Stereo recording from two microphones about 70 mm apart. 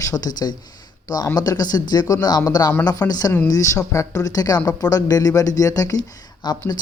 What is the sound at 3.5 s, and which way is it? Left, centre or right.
Speech, left.